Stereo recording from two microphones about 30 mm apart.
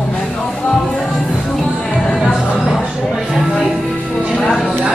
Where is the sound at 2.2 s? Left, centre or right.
Centre.